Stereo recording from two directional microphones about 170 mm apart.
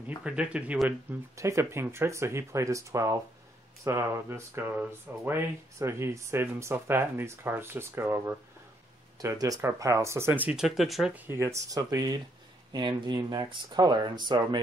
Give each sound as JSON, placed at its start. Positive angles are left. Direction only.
{"t": 0.2, "sound": "speech", "side_deg": -5}